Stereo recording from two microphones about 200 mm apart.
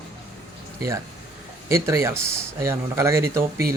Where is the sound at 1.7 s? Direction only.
15° right (ahead or behind).